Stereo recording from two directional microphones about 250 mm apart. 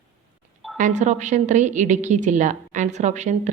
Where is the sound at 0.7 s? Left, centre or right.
Right.